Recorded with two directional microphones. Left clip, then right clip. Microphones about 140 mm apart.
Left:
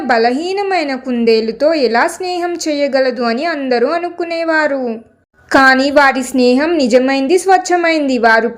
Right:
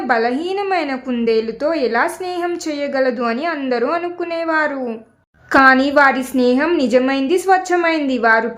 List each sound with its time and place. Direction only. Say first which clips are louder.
0.1 s a woman's voice: left 5 dB; 20° left (ahead or behind)